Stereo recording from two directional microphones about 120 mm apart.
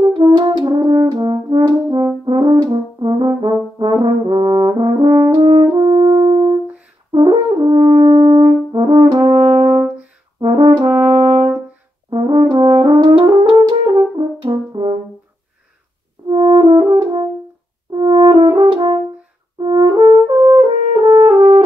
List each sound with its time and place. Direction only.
0.1 s french horn: 40° right (ahead or behind)
2.3 s brass instrument: 35° right (ahead or behind)
3.8 s french horn: 45° right (ahead or behind)
10.4 s brass instrument: 40° right (ahead or behind)
11.0 s french horn: 55° right (ahead or behind)
12.1 s brass instrument: 40° right (ahead or behind)
13.7 s french horn: 35° right (ahead or behind)
16.3 s french horn: 40° right (ahead or behind)